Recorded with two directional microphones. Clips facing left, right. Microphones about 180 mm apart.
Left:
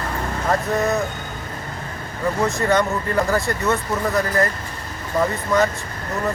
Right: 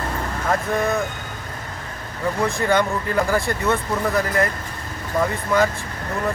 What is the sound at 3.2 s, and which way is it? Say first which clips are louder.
Speech: even; centre (ahead or behind).